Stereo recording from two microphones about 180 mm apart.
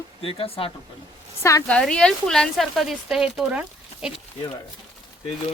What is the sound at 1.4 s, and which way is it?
A woman's voice, 15° left (ahead or behind).